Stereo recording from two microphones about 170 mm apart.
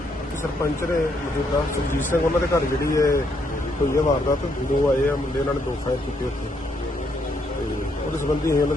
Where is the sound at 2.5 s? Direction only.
20° left (ahead or behind).